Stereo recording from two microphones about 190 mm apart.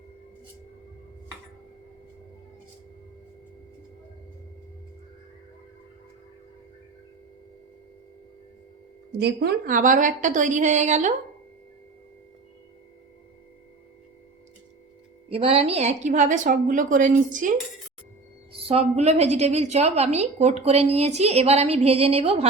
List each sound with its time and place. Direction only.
9.1 s a woman's voice: 60° right (ahead or behind); by 11.1 s 40° right (ahead or behind)
15.3 s a woman's voice: 30° right (ahead or behind)
18.6 s a woman's voice: 30° right (ahead or behind)